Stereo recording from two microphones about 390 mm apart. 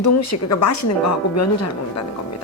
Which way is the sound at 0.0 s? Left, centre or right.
Left.